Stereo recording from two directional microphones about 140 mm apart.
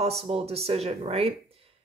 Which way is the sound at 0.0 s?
45° right (ahead or behind).